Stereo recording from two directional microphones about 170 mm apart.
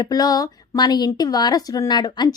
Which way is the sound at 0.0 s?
20° left (ahead or behind).